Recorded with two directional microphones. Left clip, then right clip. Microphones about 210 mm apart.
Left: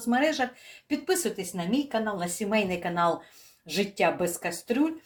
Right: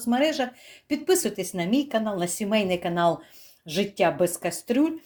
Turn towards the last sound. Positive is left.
turn(degrees=-40)  # may be behind; listen again after turning